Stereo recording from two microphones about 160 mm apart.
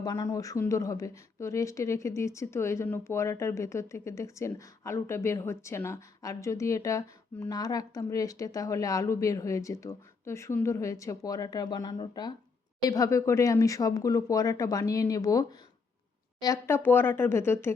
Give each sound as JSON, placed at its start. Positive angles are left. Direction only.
{"t": 0.0, "sound": "speech", "side_deg": 20}